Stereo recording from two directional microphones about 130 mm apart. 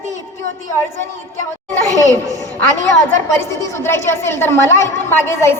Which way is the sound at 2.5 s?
15° left (ahead or behind).